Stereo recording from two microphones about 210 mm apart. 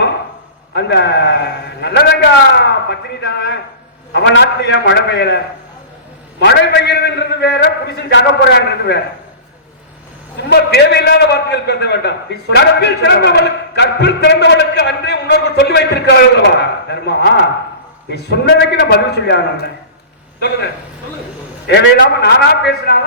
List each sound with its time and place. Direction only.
0.7 s a man's voice: 50° left (ahead or behind)
6.7 s a man's voice: 55° left (ahead or behind)
10.5 s a man's voice: 50° left (ahead or behind)
21.7 s a man's voice: 50° left (ahead or behind)